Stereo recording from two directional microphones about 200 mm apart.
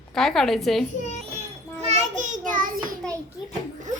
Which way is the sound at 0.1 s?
Centre (ahead or behind).